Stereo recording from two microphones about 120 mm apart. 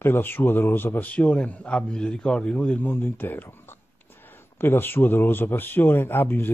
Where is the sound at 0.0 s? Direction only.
20° left (ahead or behind).